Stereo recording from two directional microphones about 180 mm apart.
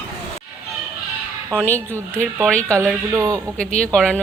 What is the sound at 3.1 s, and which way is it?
Speech, 20° right (ahead or behind).